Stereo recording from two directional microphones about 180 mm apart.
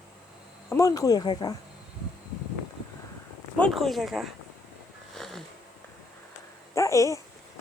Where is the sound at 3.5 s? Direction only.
5° left (ahead or behind).